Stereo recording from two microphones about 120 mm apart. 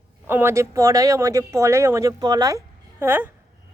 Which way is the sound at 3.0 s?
20° right (ahead or behind).